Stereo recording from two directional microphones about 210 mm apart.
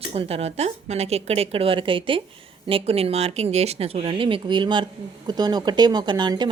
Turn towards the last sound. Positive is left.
turn(degrees=-20)  # may be behind; listen again after turning